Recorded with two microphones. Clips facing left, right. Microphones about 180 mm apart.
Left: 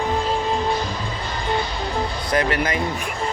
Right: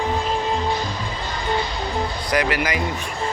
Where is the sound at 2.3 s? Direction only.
25° left (ahead or behind).